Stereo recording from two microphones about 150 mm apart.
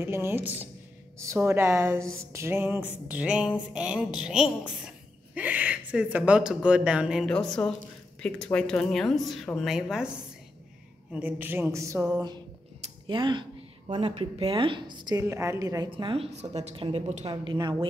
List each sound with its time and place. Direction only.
0.0 s a man's voice: 15° right (ahead or behind)
11.1 s a man's voice: 10° right (ahead or behind)
13.0 s a woman's voice: 30° right (ahead or behind)
15.9 s a woman's voice: 35° right (ahead or behind)
16.3 s a woman's voice: 45° right (ahead or behind)